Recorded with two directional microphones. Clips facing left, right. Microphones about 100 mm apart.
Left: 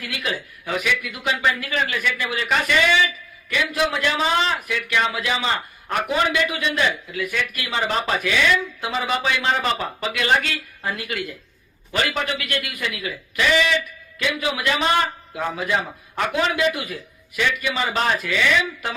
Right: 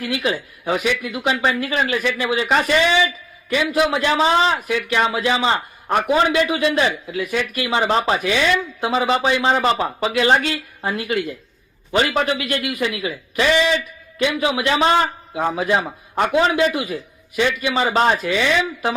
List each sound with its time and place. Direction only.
0.0 s a man's voice: 30° right (ahead or behind)